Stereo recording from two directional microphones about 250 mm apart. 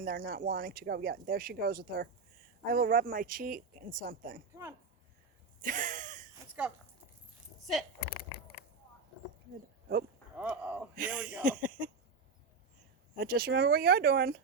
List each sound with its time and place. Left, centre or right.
0.0 s speech: right
5.6 s a sound: right
6.4 s a sound: centre
7.6 s speech: centre
10.3 s speech: centre
13.1 s speech: right